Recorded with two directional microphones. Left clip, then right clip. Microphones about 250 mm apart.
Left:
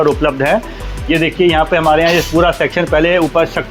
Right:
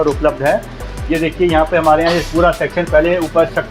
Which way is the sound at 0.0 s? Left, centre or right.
Left.